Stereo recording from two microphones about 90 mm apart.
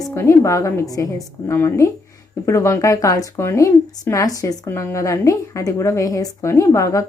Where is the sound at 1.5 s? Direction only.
30° left (ahead or behind).